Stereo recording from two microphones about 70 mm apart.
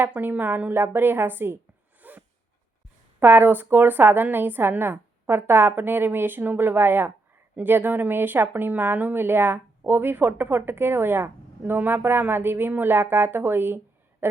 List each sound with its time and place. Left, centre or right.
0.2 s speech: right
2.0 s a sound: right
3.2 s speech: right